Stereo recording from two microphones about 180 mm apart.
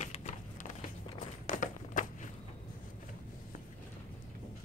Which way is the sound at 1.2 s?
45° left (ahead or behind).